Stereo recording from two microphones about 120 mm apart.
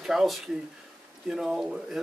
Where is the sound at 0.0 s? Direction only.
5° right (ahead or behind).